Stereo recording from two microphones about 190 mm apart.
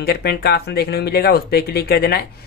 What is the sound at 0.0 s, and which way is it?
Speech, 55° left (ahead or behind).